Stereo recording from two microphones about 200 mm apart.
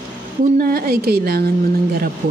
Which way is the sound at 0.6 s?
50° right (ahead or behind).